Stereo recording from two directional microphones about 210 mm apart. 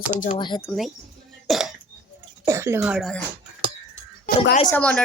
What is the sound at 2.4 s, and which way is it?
Speech, 15° right (ahead or behind).